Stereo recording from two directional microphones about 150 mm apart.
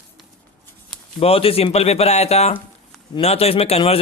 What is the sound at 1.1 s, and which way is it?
A man's voice, 40° left (ahead or behind).